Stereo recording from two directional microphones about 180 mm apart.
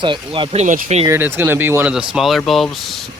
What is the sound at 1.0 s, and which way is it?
Speech, 15° right (ahead or behind).